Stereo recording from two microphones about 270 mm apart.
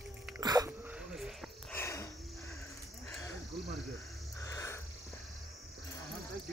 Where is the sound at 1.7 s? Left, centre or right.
Centre.